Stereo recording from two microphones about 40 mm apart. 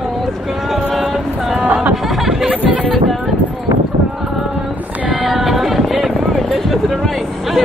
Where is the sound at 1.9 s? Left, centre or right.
Centre.